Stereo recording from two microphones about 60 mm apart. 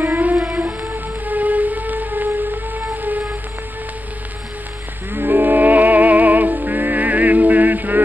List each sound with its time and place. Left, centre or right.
0.1 s music: right
0.5 s music: right
0.9 s music: right
2.4 s a sound: right
5.1 s music: right